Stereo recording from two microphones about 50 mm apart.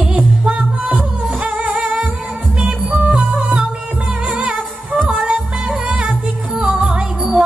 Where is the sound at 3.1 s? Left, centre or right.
Centre.